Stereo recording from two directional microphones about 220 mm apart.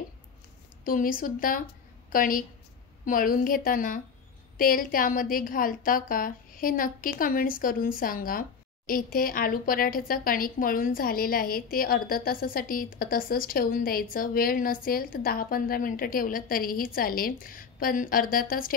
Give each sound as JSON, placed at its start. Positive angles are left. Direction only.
{"t": 0.8, "sound": "a woman's voice", "side_deg": 40}